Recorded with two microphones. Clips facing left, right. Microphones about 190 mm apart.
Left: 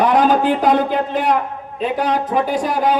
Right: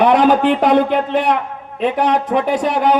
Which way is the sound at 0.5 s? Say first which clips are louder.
Right 2 dB; 65° right (ahead or behind).